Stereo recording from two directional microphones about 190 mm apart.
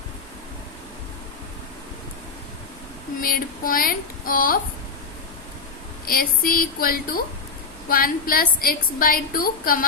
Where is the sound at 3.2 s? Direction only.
50° left (ahead or behind).